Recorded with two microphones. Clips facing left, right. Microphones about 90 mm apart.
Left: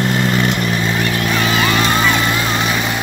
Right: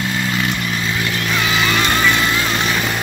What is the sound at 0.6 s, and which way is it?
Vehicle, 35° left (ahead or behind).